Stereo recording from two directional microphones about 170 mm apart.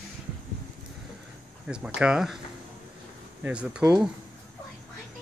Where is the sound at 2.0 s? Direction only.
5° right (ahead or behind).